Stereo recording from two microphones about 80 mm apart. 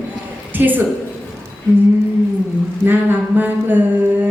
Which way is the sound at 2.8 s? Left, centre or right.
Right.